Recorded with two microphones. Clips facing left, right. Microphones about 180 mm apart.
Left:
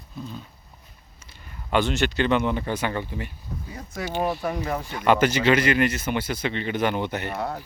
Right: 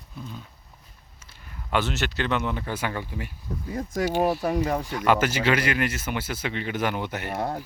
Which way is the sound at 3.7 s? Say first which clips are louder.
Right 8 dB; 50° right (ahead or behind).